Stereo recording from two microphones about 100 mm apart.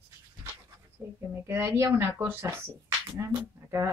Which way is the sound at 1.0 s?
30° right (ahead or behind).